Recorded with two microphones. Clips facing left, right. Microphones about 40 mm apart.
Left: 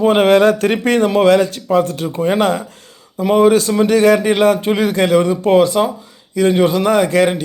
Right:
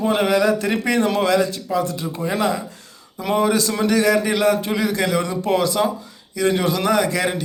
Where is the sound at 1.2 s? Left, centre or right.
Left.